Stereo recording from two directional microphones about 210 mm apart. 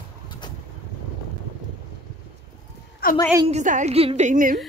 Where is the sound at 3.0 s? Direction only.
45° left (ahead or behind).